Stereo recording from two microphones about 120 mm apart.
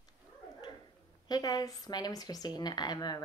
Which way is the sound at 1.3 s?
35° left (ahead or behind).